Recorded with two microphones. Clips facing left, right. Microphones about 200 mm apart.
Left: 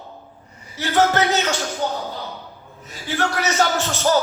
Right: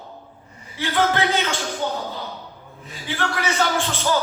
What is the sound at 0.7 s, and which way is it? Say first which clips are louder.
A man's voice: left 3 dB; 40° left (ahead or behind).